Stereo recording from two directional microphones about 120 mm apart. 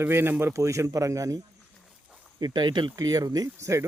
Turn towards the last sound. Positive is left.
turn(degrees=-25)  # may be behind; listen again after turning